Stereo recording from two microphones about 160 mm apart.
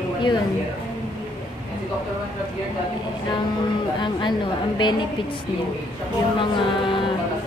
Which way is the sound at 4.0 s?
30° left (ahead or behind).